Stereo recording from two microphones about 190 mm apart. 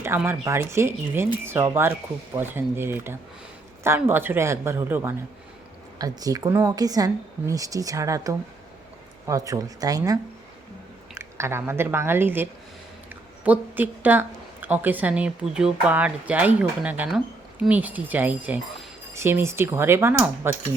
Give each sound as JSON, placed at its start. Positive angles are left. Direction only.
{"t": 0.0, "sound": "a woman's voice", "side_deg": -10}